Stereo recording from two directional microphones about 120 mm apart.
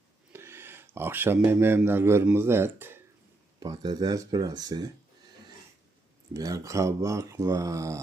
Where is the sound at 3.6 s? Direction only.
35° right (ahead or behind).